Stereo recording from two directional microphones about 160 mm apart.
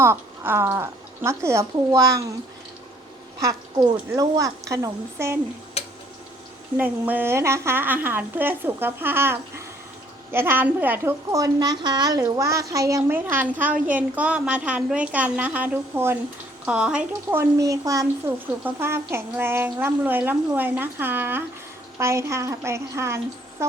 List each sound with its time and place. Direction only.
0.0 s a woman's voice: 15° right (ahead or behind)
3.4 s speech: 20° right (ahead or behind)
6.7 s a woman's voice: 10° right (ahead or behind)
17.6 s a woman's voice: 20° right (ahead or behind)